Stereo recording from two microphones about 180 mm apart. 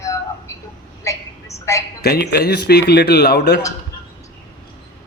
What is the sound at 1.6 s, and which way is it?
Speech, 15° left (ahead or behind).